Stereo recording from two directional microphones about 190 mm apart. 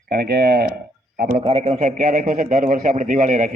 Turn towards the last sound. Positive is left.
turn(degrees=-45)  # may be behind; listen again after turning